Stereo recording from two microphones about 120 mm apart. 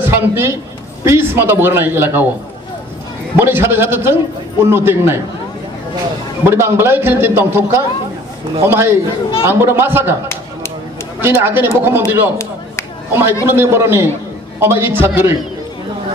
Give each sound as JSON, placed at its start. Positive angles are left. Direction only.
{"t": 0.0, "sound": "a man's voice", "side_deg": -20}
{"t": 3.3, "sound": "a man's voice", "side_deg": -20}
{"t": 6.4, "sound": "a man's voice", "side_deg": -20}
{"t": 10.2, "sound": "a sound", "side_deg": 20}
{"t": 11.1, "sound": "a man's voice", "side_deg": -20}
{"t": 13.1, "sound": "a man's voice", "side_deg": -20}